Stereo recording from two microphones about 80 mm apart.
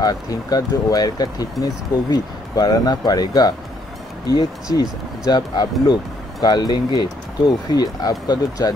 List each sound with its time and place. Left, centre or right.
0.0 s speech: left